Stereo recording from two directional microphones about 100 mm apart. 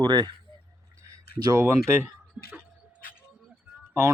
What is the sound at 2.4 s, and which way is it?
Speech, 10° right (ahead or behind).